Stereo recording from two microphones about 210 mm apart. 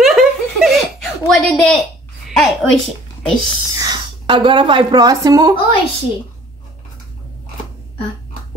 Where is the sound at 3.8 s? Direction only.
20° right (ahead or behind).